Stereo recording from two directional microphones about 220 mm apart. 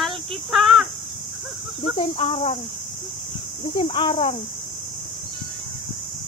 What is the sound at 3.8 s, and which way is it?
Speech, 20° left (ahead or behind).